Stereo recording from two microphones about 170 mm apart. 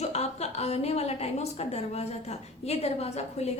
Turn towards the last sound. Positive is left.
turn(degrees=40)  # may be behind; listen again after turning